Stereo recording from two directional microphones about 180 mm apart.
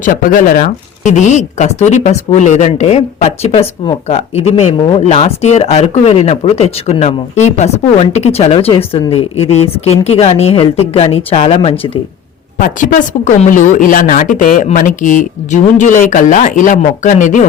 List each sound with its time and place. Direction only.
0.0 s speech: 50° left (ahead or behind); by 11.7 s 35° left (ahead or behind)
12.5 s a woman's voice: 50° left (ahead or behind)